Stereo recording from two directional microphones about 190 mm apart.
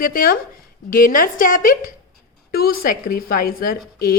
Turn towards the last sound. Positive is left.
turn(degrees=50)  # may be behind; listen again after turning